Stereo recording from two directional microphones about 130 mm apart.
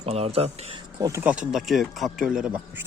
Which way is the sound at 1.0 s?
20° right (ahead or behind).